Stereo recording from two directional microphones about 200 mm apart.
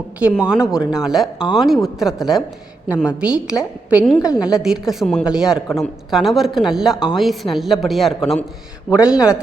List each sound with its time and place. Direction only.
0.2 s speech: 5° right (ahead or behind)
4.1 s a woman's voice: 15° left (ahead or behind)
4.4 s speech: 5° right (ahead or behind)